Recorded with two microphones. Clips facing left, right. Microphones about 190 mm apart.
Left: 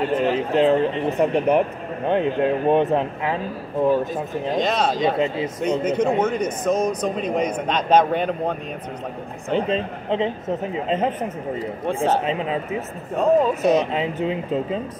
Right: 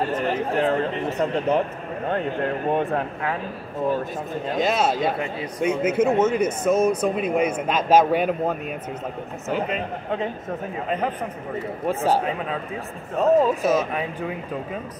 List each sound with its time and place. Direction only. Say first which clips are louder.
0.1 s a man's voice: left 4 dB; 20° left (ahead or behind)
4.6 s speech: even; 5° right (ahead or behind)
9.5 s a man's voice: left 4 dB; 25° left (ahead or behind)
12.1 s a man's voice: even; 20° left (ahead or behind)
13.2 s speech: left 1 dB; centre (ahead or behind)
13.7 s a man's voice: left 3 dB; 20° left (ahead or behind)